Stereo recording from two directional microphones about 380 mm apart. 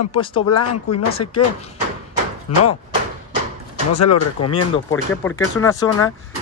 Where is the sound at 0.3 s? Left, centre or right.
Left.